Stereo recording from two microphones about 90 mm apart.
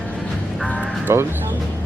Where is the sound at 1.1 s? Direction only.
30° right (ahead or behind).